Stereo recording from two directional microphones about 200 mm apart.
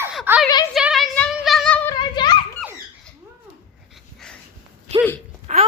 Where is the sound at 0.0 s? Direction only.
5° right (ahead or behind).